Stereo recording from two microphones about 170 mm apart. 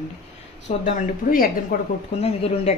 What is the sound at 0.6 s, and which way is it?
A woman's voice, 50° left (ahead or behind).